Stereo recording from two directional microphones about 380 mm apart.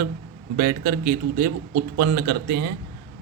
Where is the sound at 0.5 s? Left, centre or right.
Right.